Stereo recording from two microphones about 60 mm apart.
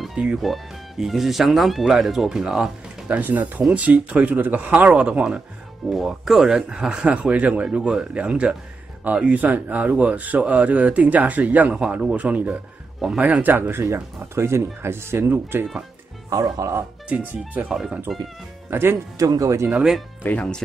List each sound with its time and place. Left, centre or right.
0.4 s speech: centre
3.1 s speech: right
5.9 s speech: centre; by 15.6 s right
16.3 s speech: right
17.6 s speech: centre
18.7 s speech: right
19.1 s speech: right
20.2 s speech: left